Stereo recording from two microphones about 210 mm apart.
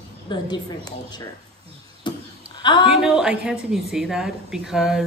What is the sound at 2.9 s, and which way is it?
A woman's voice, 5° right (ahead or behind).